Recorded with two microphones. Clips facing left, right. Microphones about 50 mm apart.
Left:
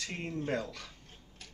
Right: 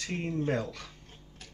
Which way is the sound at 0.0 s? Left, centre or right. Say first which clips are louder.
Right 5 dB; centre.